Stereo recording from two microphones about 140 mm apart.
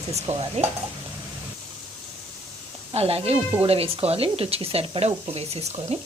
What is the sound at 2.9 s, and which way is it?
Speech, 45° right (ahead or behind).